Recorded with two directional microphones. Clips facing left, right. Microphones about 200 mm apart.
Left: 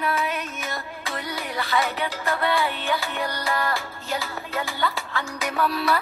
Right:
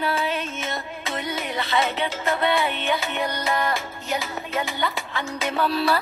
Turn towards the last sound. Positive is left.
turn(degrees=-30)  # may be behind; listen again after turning